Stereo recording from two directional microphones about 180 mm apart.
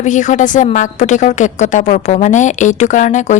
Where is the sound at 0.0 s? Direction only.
45° left (ahead or behind).